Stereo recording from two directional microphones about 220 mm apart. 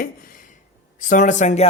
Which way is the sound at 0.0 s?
40° left (ahead or behind).